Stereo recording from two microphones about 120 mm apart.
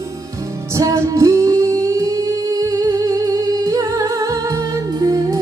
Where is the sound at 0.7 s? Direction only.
25° right (ahead or behind).